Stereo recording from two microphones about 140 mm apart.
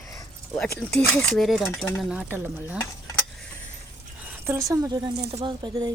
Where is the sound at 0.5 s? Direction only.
5° left (ahead or behind).